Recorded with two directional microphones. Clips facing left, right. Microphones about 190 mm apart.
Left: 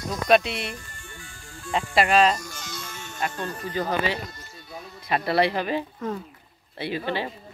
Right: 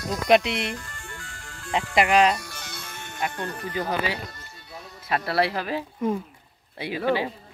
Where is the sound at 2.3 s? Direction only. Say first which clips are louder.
Left 1 dB; 60° right (ahead or behind).